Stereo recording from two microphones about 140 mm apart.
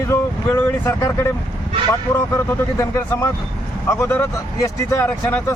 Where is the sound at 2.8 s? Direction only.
20° left (ahead or behind).